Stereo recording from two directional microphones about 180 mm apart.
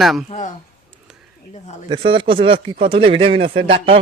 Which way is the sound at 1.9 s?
30° right (ahead or behind).